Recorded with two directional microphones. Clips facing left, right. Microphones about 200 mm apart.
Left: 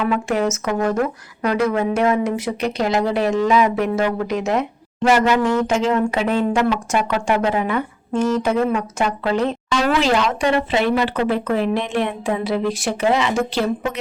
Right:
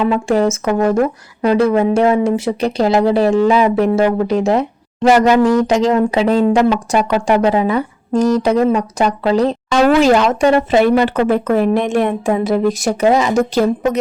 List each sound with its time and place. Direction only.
0.0 s speech: 30° right (ahead or behind)